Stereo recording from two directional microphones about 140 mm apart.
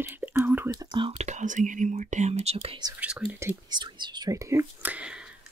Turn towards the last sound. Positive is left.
turn(degrees=-5)  # may be behind; listen again after turning